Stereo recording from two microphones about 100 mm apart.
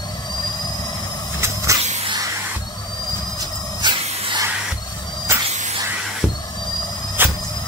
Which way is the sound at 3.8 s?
50° right (ahead or behind).